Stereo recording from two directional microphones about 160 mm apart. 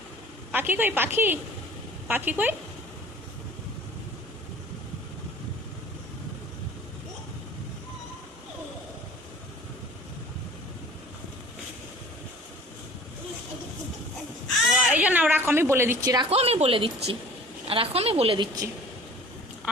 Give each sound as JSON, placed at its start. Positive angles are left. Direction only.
{"t": 0.5, "sound": "a woman's voice", "side_deg": -10}
{"t": 14.6, "sound": "a sound", "side_deg": -5}
{"t": 16.3, "sound": "speech", "side_deg": -40}